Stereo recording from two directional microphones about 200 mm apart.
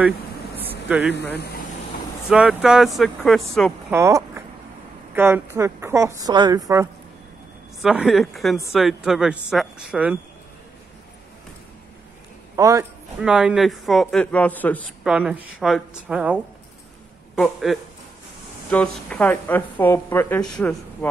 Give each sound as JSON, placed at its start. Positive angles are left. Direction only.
{"t": 0.6, "sound": "a sound", "side_deg": -10}
{"t": 1.0, "sound": "speech", "side_deg": 60}
{"t": 2.2, "sound": "a woman's voice", "side_deg": -5}
{"t": 3.9, "sound": "a woman's voice", "side_deg": -15}
{"t": 7.8, "sound": "a woman's voice", "side_deg": 0}
{"t": 12.5, "sound": "a man's voice", "side_deg": -15}
{"t": 13.2, "sound": "a woman's voice", "side_deg": -5}
{"t": 15.0, "sound": "a woman's voice", "side_deg": -5}
{"t": 17.4, "sound": "a woman's voice", "side_deg": 0}